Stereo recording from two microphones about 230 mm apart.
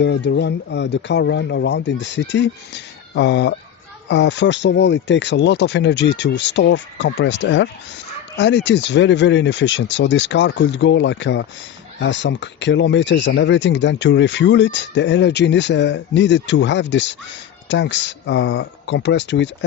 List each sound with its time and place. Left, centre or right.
0.0 s speech: left